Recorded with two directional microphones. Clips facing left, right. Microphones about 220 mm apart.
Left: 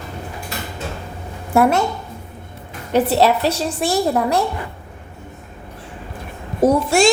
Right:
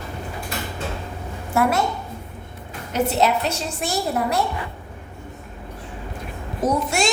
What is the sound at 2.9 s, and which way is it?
A woman's voice, 35° left (ahead or behind).